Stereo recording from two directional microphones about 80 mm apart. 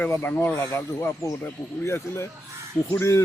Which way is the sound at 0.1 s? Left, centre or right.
Left.